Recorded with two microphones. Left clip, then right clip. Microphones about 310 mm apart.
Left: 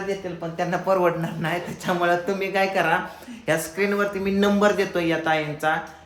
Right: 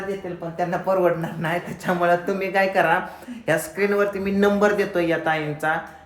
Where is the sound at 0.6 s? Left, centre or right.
Centre.